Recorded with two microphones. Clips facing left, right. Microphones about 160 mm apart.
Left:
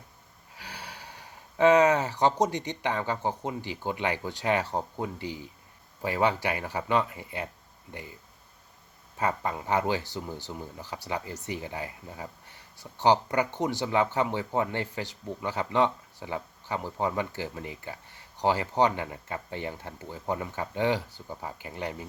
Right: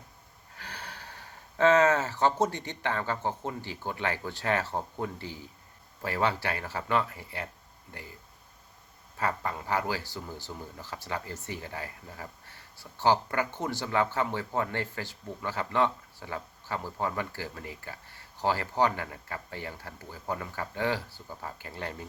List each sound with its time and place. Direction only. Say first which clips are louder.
0.5 s speech: left 1 dB; 10° left (ahead or behind)
9.1 s speech: left 2 dB; 20° left (ahead or behind)